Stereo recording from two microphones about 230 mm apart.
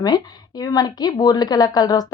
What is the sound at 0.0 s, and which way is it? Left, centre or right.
A woman's voice, centre.